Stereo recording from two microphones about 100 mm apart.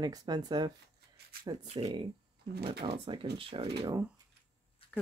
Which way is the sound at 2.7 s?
65° right (ahead or behind).